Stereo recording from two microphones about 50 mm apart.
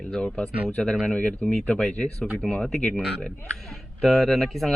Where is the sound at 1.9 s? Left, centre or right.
Left.